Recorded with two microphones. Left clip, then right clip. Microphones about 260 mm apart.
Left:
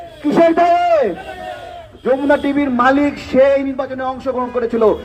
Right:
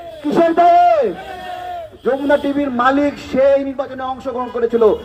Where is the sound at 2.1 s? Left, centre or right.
Left.